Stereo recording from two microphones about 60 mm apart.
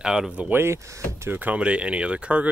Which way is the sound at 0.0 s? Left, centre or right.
Centre.